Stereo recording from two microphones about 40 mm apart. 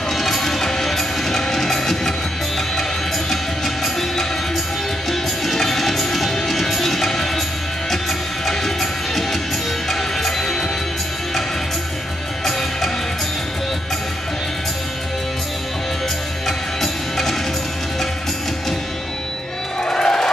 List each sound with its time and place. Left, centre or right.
0.1 s music: centre
8.5 s music: centre
16.4 s music: centre
19.8 s music: centre